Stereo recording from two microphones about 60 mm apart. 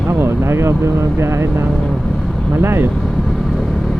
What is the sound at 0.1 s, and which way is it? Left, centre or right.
Vehicle, right.